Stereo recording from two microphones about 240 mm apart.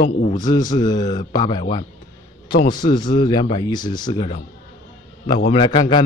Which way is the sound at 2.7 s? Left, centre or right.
Centre.